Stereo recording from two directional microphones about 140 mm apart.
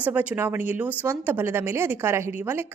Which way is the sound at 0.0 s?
10° right (ahead or behind).